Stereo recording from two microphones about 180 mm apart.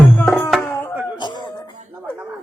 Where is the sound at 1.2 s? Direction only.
25° left (ahead or behind).